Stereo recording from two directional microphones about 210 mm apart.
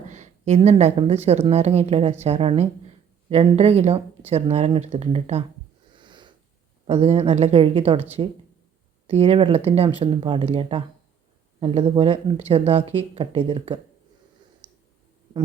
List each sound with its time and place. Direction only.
0.1 s a woman's voice: 35° right (ahead or behind)
5.9 s sniff: 20° right (ahead or behind)
6.8 s speech: 30° right (ahead or behind)